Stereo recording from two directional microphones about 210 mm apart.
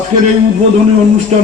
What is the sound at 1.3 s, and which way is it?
Music, 30° right (ahead or behind).